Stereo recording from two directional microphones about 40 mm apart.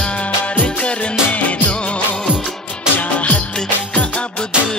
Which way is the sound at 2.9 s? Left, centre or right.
Left.